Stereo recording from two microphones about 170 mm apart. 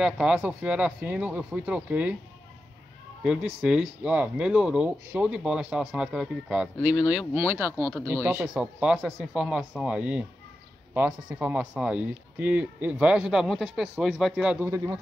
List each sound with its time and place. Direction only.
0.0 s speech: 5° right (ahead or behind)
3.3 s speech: 5° right (ahead or behind)